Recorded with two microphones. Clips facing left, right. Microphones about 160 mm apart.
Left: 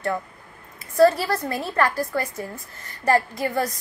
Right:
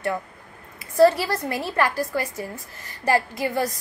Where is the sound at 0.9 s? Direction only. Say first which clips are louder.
Even; 15° right (ahead or behind).